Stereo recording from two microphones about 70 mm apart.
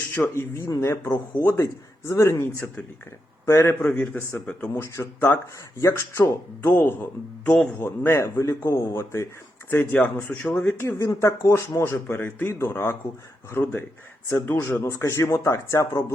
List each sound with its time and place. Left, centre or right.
0.1 s a man's voice: left
3.9 s a man's voice: left
9.6 s speech: left
10.8 s a man's voice: left
13.6 s speech: left
14.8 s a man's voice: left